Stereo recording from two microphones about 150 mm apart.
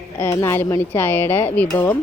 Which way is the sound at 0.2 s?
20° left (ahead or behind).